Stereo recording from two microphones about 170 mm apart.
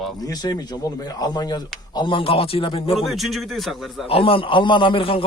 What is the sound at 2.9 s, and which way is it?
Speech, centre (ahead or behind).